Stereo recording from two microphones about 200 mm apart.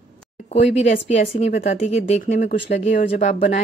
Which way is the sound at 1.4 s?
35° left (ahead or behind).